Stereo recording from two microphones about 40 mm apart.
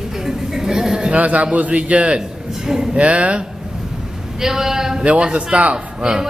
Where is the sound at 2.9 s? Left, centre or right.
Right.